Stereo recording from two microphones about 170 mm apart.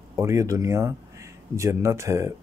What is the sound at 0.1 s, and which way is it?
Speech, 15° right (ahead or behind).